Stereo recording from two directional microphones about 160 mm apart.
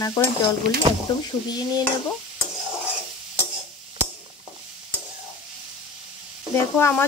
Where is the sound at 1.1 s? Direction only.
30° left (ahead or behind).